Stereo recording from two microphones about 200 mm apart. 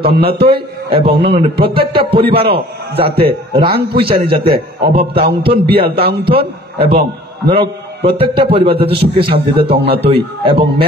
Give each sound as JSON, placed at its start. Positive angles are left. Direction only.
{"t": 0.0, "sound": "a man's voice", "side_deg": -25}
{"t": 9.8, "sound": "a man's voice", "side_deg": -55}
{"t": 10.0, "sound": "a man's voice", "side_deg": -25}